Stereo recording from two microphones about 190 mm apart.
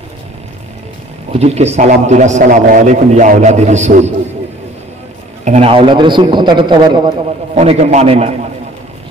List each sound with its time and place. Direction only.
1.3 s a man's voice: 35° right (ahead or behind)
5.4 s a man's voice: 35° right (ahead or behind)
7.5 s a man's voice: 35° right (ahead or behind)